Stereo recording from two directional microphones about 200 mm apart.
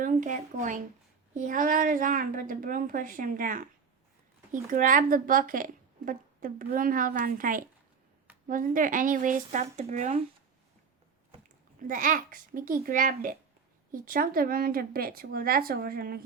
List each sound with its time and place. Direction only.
0.0 s a woman's voice: 40° right (ahead or behind)
4.7 s a woman's voice: 40° right (ahead or behind)
11.9 s a woman's voice: 40° right (ahead or behind)